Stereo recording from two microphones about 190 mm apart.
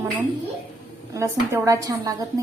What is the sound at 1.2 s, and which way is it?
Speech, 15° right (ahead or behind).